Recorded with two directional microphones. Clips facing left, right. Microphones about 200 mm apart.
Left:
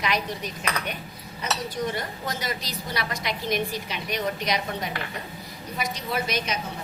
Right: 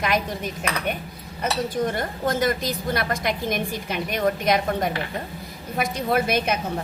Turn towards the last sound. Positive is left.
turn(degrees=-55)  # may be behind; listen again after turning